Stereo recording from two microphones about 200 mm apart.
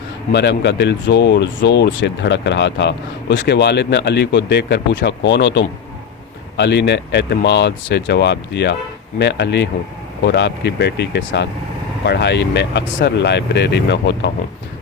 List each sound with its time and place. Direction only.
0.3 s speech: 60° left (ahead or behind)